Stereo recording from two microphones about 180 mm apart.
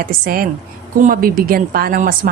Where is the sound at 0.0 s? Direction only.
55° right (ahead or behind).